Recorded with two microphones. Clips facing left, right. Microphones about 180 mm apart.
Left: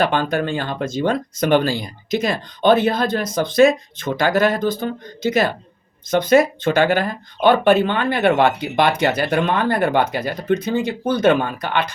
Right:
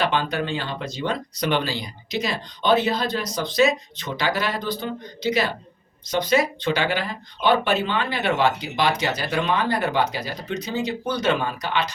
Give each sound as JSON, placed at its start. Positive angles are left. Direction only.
{"t": 0.0, "sound": "speech", "side_deg": 50}